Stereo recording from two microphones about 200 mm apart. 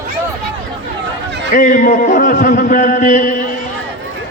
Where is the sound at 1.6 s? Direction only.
40° left (ahead or behind).